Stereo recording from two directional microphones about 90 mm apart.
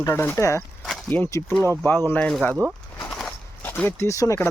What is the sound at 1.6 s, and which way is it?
Speech, 35° right (ahead or behind).